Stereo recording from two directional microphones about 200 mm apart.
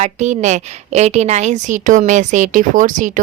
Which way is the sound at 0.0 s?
35° right (ahead or behind).